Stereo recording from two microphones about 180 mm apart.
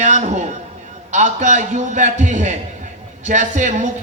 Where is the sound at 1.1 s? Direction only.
40° right (ahead or behind).